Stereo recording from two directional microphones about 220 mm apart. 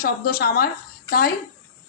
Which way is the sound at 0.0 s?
45° left (ahead or behind).